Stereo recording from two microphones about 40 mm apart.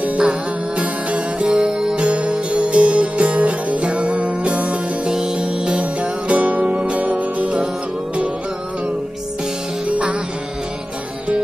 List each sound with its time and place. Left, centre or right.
0.2 s music: right
1.6 s music: centre
2.0 s music: right
5.1 s music: centre; by 7.6 s right
9.8 s music: right